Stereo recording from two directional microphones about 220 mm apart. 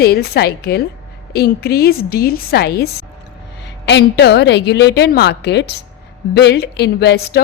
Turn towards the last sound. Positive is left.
turn(degrees=50)  # may be behind; listen again after turning